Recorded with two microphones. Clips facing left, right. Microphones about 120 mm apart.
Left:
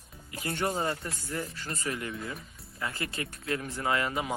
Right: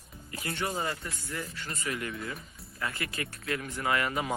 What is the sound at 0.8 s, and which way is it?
Speech, 30° left (ahead or behind).